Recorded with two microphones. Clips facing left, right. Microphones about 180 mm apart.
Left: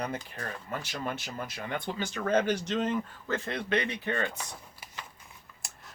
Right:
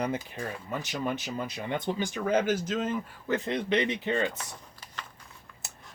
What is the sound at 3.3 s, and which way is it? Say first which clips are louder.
Speech: right 4 dB; 15° right (ahead or behind).